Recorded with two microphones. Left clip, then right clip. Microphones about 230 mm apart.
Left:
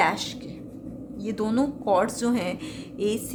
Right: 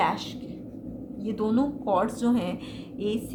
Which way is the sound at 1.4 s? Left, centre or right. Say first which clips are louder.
Left 1 dB; left.